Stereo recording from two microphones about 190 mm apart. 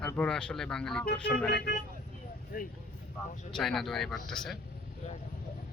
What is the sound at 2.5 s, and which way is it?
Speech, 50° left (ahead or behind).